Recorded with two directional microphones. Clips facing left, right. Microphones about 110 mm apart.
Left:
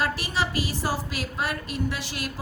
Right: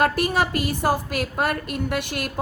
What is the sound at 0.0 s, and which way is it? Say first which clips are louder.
A woman's voice: right 6 dB; 55° right (ahead or behind).